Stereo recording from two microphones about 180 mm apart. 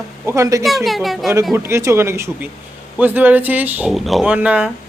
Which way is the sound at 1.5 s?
15° right (ahead or behind).